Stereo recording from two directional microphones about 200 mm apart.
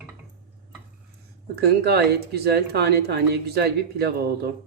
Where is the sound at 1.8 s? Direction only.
55° right (ahead or behind).